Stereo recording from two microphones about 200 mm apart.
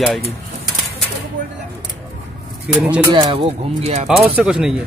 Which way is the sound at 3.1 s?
25° right (ahead or behind).